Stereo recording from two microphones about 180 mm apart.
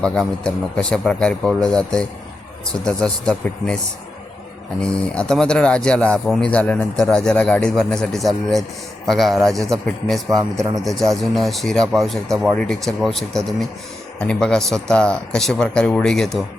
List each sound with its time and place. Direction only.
0.0 s speech: 5° left (ahead or behind)
4.8 s speech: 5° left (ahead or behind)
10.2 s a man's voice: 20° right (ahead or behind)
11.4 s speech: centre (ahead or behind)